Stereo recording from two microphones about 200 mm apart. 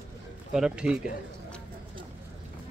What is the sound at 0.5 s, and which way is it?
Speech, 5° right (ahead or behind).